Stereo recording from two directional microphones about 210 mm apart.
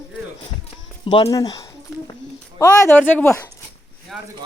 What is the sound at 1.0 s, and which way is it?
Speech, 25° left (ahead or behind).